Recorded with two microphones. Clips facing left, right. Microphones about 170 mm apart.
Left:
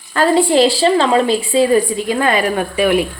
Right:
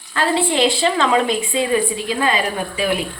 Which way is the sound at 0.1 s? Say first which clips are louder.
Left 6 dB; 45° left (ahead or behind).